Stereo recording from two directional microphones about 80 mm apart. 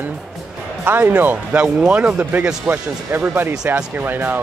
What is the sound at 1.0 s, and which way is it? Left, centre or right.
Speech, centre.